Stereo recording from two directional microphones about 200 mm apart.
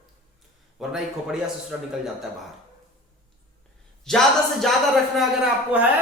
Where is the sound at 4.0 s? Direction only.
Centre (ahead or behind).